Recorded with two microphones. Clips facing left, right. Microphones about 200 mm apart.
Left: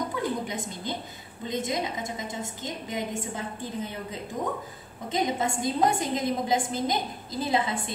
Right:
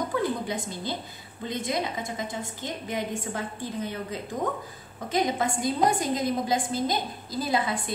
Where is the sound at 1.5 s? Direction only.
20° left (ahead or behind).